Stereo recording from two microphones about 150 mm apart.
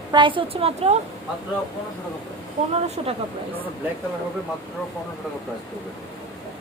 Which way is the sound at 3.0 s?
40° right (ahead or behind).